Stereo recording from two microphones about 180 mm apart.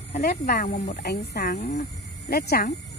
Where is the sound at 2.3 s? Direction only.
60° left (ahead or behind).